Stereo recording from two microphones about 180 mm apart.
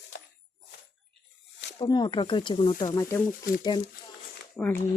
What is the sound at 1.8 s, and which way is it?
Speech, 25° left (ahead or behind).